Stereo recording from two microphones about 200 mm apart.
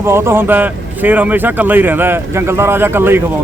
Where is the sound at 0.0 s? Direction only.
10° right (ahead or behind).